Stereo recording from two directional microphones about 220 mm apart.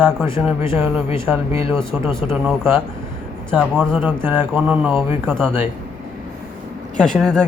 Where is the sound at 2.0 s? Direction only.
25° left (ahead or behind).